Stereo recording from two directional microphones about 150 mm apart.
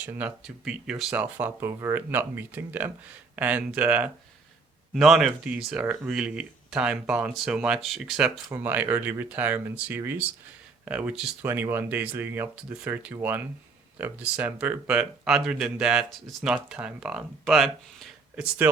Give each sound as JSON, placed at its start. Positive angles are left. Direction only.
{"t": 0.0, "sound": "speech", "side_deg": -10}
{"t": 8.4, "sound": "speech", "side_deg": -15}
{"t": 18.6, "sound": "speech", "side_deg": -10}